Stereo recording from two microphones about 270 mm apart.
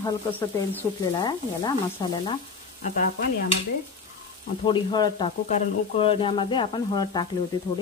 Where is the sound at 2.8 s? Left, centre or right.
Left.